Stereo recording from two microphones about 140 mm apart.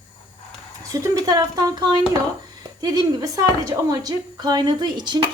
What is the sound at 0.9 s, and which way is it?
A woman's voice, 20° right (ahead or behind).